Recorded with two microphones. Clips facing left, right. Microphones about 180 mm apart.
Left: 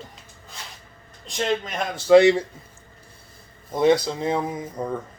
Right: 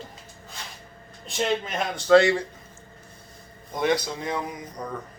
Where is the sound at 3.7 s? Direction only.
25° left (ahead or behind).